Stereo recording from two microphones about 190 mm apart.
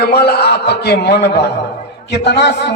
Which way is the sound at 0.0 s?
55° left (ahead or behind).